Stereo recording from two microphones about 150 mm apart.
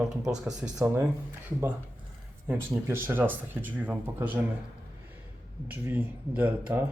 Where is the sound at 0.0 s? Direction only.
Centre (ahead or behind).